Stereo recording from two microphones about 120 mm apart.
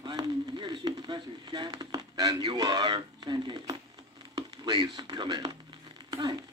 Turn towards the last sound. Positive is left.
turn(degrees=-35)  # may be behind; listen again after turning